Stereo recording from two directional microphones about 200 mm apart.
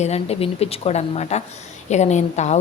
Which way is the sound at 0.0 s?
30° left (ahead or behind).